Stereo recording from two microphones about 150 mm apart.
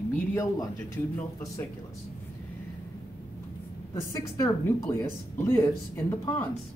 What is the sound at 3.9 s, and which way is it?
A woman's voice, 25° left (ahead or behind).